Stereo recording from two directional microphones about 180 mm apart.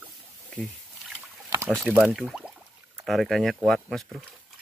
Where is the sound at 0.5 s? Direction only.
Centre (ahead or behind).